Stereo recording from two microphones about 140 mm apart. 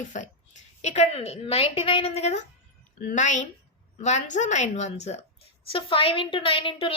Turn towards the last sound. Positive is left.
turn(degrees=40)  # may be behind; listen again after turning